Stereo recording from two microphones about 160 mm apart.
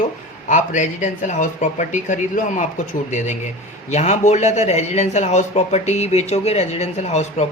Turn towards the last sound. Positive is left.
turn(degrees=45)  # may be behind; listen again after turning